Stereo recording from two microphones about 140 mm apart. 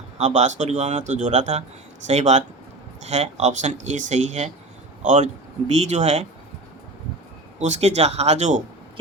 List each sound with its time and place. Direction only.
0.2 s speech: 55° right (ahead or behind)
7.6 s speech: 55° right (ahead or behind)